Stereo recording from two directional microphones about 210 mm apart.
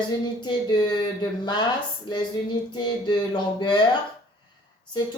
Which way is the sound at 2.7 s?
20° left (ahead or behind).